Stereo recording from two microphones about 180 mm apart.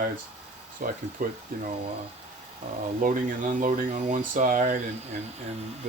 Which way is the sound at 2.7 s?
35° right (ahead or behind).